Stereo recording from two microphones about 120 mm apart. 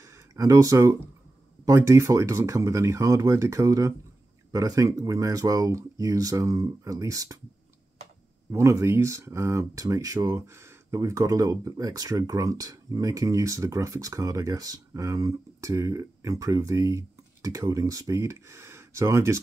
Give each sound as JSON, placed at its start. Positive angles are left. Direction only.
{"t": 0.0, "sound": "a sound", "side_deg": -25}
{"t": 1.7, "sound": "speech", "side_deg": -25}
{"t": 8.5, "sound": "speech", "side_deg": -25}